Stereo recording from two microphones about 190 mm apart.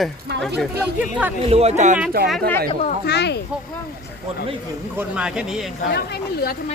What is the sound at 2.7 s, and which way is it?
Speech, 35° left (ahead or behind).